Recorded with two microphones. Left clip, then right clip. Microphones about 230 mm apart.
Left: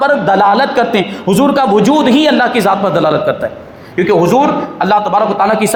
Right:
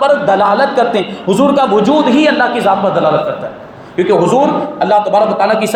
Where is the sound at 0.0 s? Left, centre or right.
Left.